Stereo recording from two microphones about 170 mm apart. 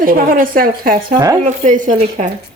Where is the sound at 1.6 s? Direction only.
45° right (ahead or behind).